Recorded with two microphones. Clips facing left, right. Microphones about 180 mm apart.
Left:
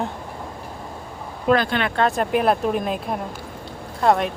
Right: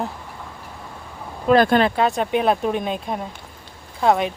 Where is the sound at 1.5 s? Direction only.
40° right (ahead or behind).